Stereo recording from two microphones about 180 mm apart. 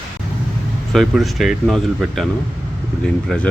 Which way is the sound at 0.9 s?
Centre (ahead or behind).